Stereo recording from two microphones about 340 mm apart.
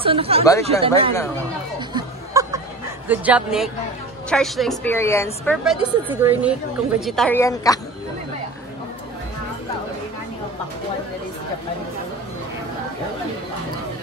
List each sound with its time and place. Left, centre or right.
0.0 s speech: centre
2.0 s chatter: centre
3.1 s a woman's voice: centre